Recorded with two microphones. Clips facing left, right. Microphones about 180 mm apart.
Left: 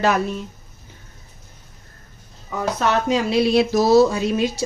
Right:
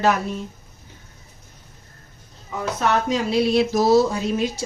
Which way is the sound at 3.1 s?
80° left.